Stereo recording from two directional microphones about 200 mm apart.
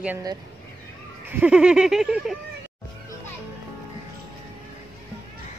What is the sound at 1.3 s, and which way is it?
Speech, 5° right (ahead or behind).